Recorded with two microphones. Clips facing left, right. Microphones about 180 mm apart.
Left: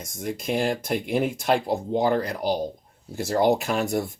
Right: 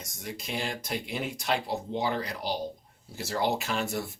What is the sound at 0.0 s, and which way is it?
Speech, 50° left (ahead or behind).